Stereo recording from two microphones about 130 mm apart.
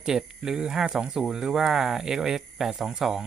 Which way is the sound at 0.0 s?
5° right (ahead or behind).